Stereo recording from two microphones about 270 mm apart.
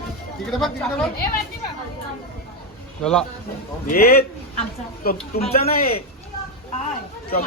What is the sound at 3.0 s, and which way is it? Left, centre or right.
Speech, centre.